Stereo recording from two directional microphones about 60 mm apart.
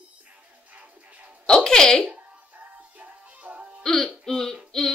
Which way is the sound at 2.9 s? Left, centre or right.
Right.